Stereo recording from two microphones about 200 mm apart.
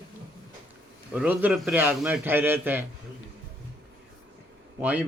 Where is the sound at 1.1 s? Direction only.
5° right (ahead or behind).